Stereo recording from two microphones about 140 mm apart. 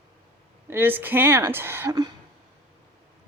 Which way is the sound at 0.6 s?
15° right (ahead or behind).